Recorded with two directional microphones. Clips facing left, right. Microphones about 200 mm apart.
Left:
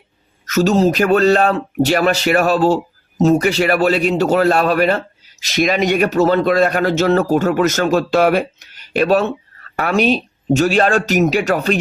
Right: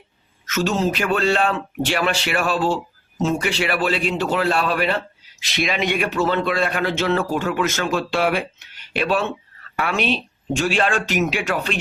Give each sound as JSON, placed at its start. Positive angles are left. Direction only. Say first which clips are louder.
{"t": 0.4, "sound": "speech", "louder": "left 7 dB", "side_deg": 40}